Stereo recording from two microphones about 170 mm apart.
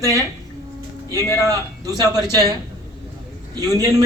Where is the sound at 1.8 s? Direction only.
20° right (ahead or behind).